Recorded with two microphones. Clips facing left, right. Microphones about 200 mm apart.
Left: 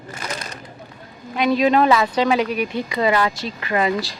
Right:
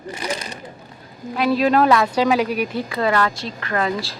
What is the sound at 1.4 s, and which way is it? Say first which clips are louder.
Speech: even; centre (ahead or behind).